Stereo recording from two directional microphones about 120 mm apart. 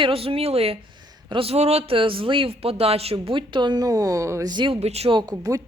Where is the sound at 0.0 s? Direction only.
50° right (ahead or behind); by 4.5 s 25° right (ahead or behind).